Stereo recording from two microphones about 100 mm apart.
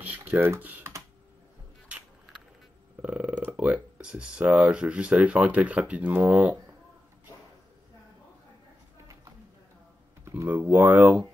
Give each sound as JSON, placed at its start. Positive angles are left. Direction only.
{"t": 0.0, "sound": "typing", "side_deg": -15}
{"t": 0.6, "sound": "speech", "side_deg": -15}
{"t": 3.0, "sound": "speech", "side_deg": -10}
{"t": 10.2, "sound": "computer keyboard", "side_deg": -30}
{"t": 10.5, "sound": "speech", "side_deg": -15}